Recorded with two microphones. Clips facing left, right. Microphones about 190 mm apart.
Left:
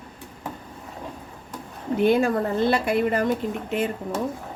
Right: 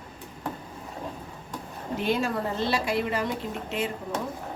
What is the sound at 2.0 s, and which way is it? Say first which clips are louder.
A woman's voice: left 7 dB; 55° left (ahead or behind).